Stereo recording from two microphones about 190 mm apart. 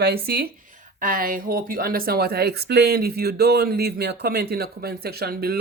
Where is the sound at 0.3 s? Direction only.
55° right (ahead or behind).